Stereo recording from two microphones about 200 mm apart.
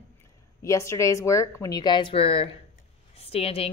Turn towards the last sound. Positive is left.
turn(degrees=30)  # may be behind; listen again after turning